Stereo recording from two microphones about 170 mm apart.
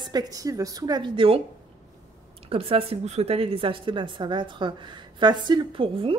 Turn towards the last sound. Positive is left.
turn(degrees=-30)  # may be behind; listen again after turning